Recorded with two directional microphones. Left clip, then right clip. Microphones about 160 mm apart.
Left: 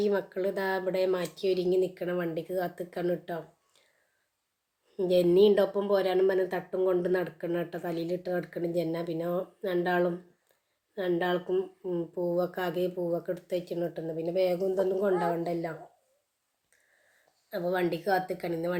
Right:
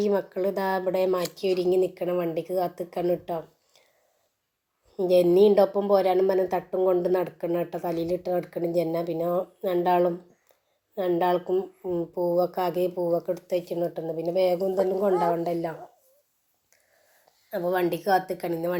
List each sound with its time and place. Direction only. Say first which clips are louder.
0.0 s a woman's voice: right 4 dB; 10° right (ahead or behind)
4.9 s a woman's voice: right 4 dB; 10° right (ahead or behind)
17.5 s a woman's voice: right 4 dB; 15° right (ahead or behind)